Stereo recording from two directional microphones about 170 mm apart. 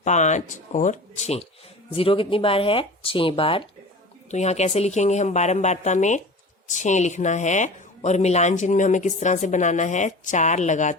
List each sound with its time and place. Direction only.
0.0 s speech: 45° left (ahead or behind)